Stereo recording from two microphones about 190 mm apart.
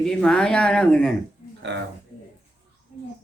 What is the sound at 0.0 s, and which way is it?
Speech, 5° left (ahead or behind).